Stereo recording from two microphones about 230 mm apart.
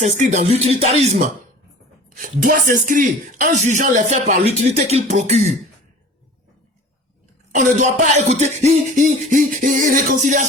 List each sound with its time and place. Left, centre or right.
0.0 s music: right
2.1 s speech: right
7.5 s speech: right